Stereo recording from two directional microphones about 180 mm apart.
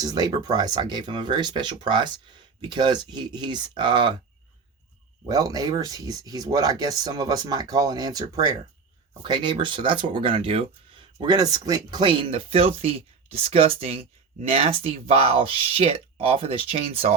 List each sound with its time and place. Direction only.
0.0 s speech: 20° right (ahead or behind)
5.2 s speech: 20° right (ahead or behind)